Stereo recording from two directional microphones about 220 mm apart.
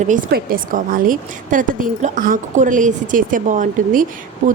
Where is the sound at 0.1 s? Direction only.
40° right (ahead or behind).